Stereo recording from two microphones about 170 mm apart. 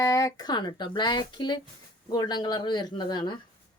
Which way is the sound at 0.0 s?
20° left (ahead or behind).